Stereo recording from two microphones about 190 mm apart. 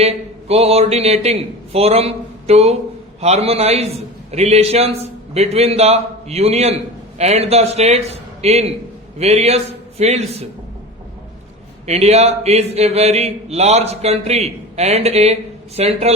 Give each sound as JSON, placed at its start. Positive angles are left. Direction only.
{"t": 0.0, "sound": "a man's voice", "side_deg": -35}
{"t": 11.9, "sound": "a man's voice", "side_deg": -35}